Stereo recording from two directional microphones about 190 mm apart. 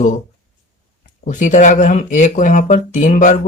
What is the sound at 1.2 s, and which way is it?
Speech, 40° left (ahead or behind).